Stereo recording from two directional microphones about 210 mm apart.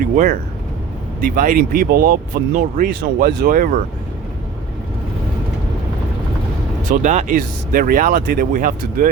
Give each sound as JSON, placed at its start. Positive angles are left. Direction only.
{"t": 0.0, "sound": "speech", "side_deg": -40}
{"t": 6.9, "sound": "speech", "side_deg": -35}